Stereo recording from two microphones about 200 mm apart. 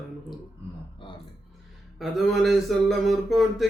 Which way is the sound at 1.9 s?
Centre (ahead or behind).